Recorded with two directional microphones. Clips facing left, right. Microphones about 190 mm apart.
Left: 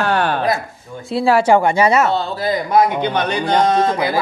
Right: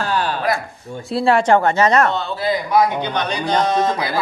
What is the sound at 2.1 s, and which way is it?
A man's voice, 40° left (ahead or behind).